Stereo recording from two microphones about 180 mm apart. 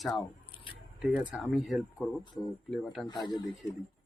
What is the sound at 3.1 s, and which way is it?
Speech, 25° left (ahead or behind).